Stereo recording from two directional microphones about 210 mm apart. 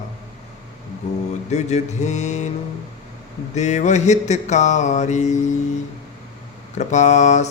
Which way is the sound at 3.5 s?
35° left (ahead or behind).